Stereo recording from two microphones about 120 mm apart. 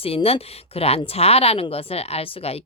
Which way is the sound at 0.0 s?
55° left (ahead or behind).